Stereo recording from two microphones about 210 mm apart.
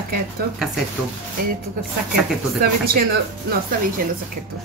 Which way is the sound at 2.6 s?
45° right (ahead or behind).